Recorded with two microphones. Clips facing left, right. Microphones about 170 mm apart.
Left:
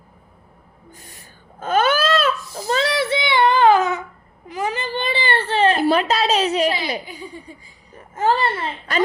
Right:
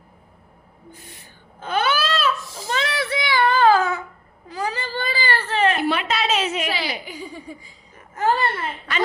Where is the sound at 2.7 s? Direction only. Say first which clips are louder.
Left 5 dB; 30° left (ahead or behind).